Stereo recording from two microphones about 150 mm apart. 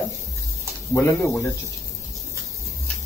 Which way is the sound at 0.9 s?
15° left (ahead or behind).